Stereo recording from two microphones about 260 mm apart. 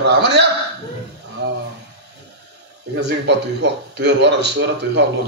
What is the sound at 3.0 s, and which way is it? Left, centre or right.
A man's voice, right.